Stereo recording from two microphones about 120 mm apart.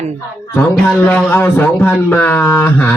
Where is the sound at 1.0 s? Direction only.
15° left (ahead or behind).